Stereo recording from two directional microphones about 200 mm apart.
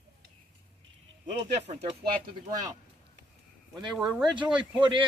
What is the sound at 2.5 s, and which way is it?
Speech, 20° right (ahead or behind).